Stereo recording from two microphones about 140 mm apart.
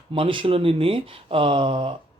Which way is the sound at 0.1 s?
35° right (ahead or behind).